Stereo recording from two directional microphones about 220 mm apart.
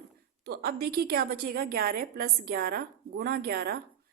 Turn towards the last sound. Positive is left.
turn(degrees=-45)  # may be behind; listen again after turning